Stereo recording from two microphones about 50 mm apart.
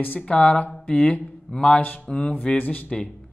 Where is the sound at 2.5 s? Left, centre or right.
Left.